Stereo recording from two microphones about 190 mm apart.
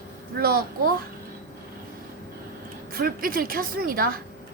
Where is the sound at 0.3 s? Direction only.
50° right (ahead or behind).